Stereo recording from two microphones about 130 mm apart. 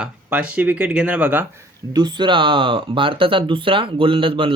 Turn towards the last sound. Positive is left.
turn(degrees=-40)  # may be behind; listen again after turning